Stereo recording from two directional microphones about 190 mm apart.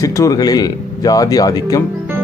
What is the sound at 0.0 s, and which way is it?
Speech, 20° left (ahead or behind).